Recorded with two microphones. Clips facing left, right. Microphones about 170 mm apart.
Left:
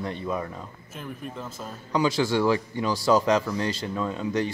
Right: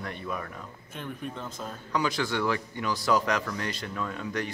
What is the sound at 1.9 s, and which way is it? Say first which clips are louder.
A man's voice: left 5 dB; 25° left (ahead or behind).